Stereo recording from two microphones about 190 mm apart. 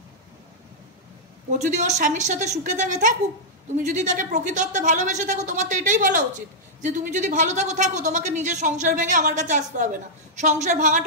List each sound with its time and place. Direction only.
1.6 s speech: 40° right (ahead or behind)